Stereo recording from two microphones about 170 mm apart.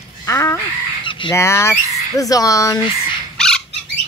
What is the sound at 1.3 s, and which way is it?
Speech, 15° left (ahead or behind).